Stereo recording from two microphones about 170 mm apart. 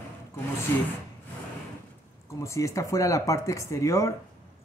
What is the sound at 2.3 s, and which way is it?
Speech, 15° left (ahead or behind).